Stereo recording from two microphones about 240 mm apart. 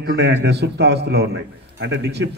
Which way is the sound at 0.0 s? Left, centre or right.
Right.